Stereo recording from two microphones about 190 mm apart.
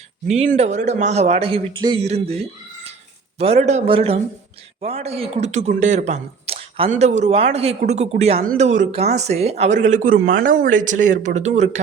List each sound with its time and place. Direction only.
0.3 s speech: 35° right (ahead or behind)